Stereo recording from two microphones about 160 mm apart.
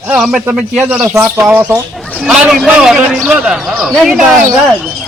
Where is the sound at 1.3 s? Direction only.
10° right (ahead or behind).